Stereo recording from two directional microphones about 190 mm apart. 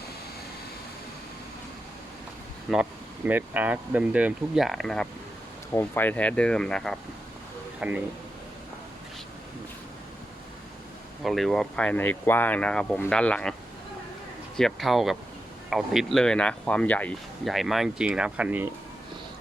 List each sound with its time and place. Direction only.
2.7 s speech: centre (ahead or behind)
7.8 s speech: 5° right (ahead or behind)
11.2 s speech: centre (ahead or behind)